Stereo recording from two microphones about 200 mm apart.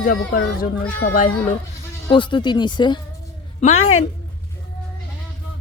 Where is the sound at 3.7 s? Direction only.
90° left.